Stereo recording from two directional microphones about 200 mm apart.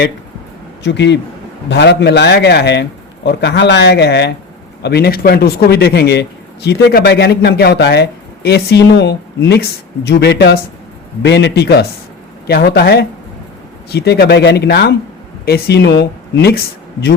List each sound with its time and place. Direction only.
0.9 s speech: 60° left (ahead or behind)